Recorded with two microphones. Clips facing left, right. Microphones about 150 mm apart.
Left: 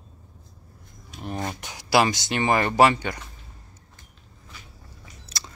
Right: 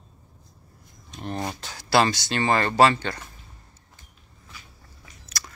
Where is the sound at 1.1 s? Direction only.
5° left (ahead or behind).